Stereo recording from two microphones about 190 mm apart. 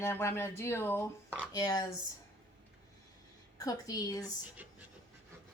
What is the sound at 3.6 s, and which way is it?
Speech, 20° left (ahead or behind).